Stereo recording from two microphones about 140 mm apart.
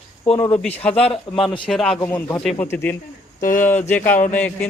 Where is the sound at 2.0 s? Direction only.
15° left (ahead or behind).